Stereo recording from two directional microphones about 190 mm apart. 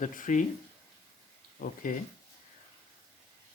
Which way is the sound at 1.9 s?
45° left (ahead or behind).